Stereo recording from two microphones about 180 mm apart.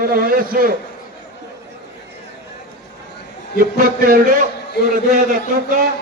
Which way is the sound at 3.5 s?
50° right (ahead or behind).